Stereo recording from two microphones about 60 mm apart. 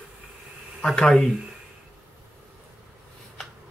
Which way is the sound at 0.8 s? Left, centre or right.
Centre.